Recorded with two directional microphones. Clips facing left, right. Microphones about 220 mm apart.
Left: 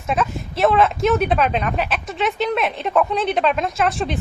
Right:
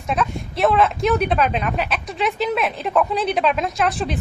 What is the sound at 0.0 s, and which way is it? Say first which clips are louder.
Speech: left 1 dB; centre (ahead or behind).